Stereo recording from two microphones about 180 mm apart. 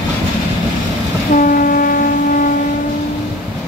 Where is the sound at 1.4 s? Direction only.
50° left (ahead or behind).